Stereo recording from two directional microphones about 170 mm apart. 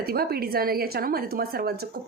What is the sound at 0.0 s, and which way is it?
A woman's voice, 65° right (ahead or behind).